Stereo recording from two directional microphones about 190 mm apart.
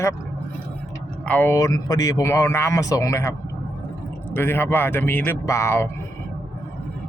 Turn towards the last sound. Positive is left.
turn(degrees=15)  # may be behind; listen again after turning